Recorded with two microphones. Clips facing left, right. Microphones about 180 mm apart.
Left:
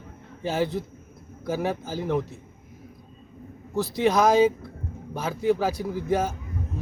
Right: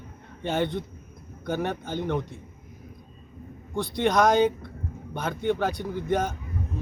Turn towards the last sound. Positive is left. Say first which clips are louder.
# left 1 dB
turn(degrees=5)  # may be behind; listen again after turning